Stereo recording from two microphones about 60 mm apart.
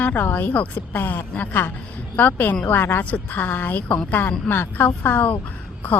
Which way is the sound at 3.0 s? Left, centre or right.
Left.